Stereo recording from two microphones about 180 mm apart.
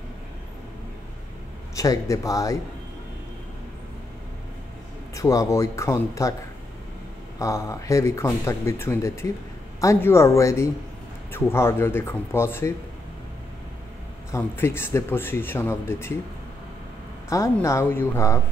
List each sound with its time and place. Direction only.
1.8 s a man's voice: 20° left (ahead or behind)
5.1 s speech: 15° left (ahead or behind)
7.3 s speech: 15° left (ahead or behind)
14.3 s speech: 15° left (ahead or behind)
17.3 s speech: 15° left (ahead or behind)